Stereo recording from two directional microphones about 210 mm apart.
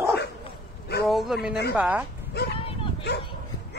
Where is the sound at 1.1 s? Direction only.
Centre (ahead or behind).